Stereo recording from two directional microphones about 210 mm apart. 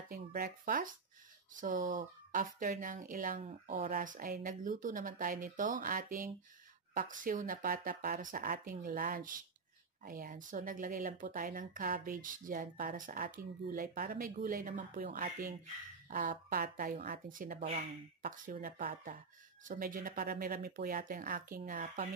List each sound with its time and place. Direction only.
0.3 s speech: 40° right (ahead or behind)
17.6 s speech: 30° right (ahead or behind)
18.2 s speech: 40° right (ahead or behind)